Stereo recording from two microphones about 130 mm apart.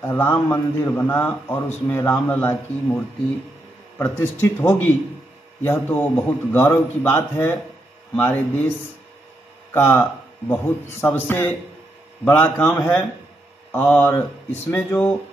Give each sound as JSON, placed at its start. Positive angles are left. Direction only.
{"t": 0.0, "sound": "a man's voice", "side_deg": 15}
{"t": 4.0, "sound": "a man's voice", "side_deg": 15}
{"t": 9.8, "sound": "a man's voice", "side_deg": 15}
{"t": 14.0, "sound": "a man's voice", "side_deg": 15}